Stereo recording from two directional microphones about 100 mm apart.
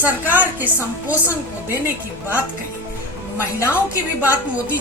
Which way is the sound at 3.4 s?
25° left (ahead or behind).